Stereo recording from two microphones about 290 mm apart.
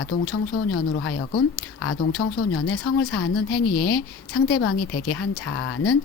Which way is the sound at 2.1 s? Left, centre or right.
Left.